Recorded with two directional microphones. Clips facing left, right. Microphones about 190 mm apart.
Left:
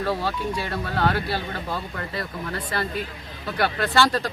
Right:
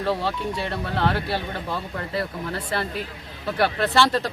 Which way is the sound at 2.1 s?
30° right (ahead or behind).